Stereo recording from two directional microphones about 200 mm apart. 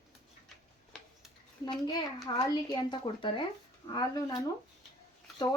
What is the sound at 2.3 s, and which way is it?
Speech, 20° left (ahead or behind).